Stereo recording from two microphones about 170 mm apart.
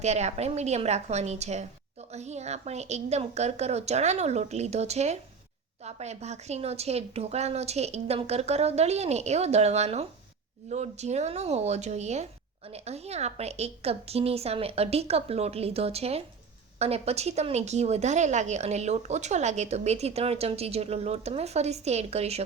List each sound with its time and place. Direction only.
0.0 s a woman's voice: 40° right (ahead or behind)